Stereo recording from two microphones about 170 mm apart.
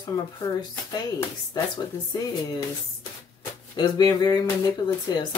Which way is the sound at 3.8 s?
25° left (ahead or behind).